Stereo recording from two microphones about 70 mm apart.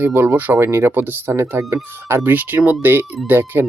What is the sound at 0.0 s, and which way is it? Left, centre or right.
Speech, right.